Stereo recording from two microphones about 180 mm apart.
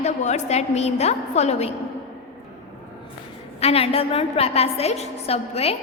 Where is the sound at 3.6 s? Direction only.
35° left (ahead or behind).